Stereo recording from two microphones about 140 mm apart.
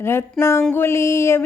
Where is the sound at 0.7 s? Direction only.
20° left (ahead or behind).